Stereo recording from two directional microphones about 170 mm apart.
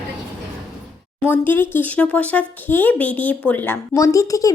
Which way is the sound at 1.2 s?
10° left (ahead or behind).